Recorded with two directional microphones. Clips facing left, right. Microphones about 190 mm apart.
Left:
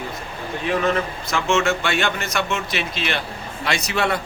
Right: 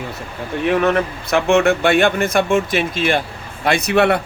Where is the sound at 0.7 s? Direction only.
60° right (ahead or behind).